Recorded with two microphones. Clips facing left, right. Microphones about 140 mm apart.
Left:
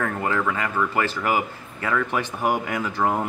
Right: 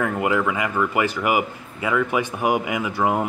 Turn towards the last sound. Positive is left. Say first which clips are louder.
# right 2 dB
turn(degrees=-10)  # may be behind; listen again after turning